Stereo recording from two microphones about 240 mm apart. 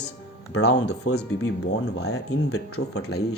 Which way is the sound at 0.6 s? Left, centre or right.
Left.